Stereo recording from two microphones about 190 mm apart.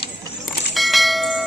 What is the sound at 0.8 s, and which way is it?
Bell, centre (ahead or behind).